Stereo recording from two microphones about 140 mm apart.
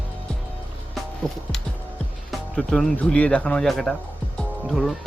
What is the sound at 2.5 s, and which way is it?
Speech, 5° left (ahead or behind).